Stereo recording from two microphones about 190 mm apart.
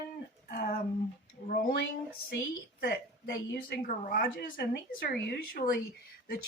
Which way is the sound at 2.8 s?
65° left (ahead or behind).